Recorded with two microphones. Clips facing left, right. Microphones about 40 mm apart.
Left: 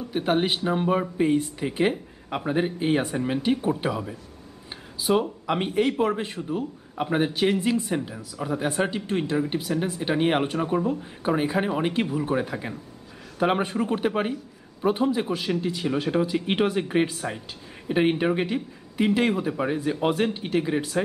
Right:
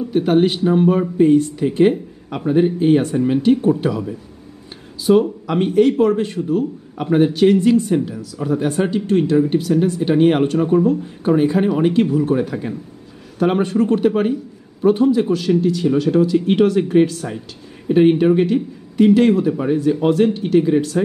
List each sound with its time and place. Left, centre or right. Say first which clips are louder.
0.0 s a man's voice: right 9 dB; centre
14.3 s a sound: right 9 dB; centre
15.3 s speech: right 9 dB; centre
15.6 s a man's voice: right 9 dB; centre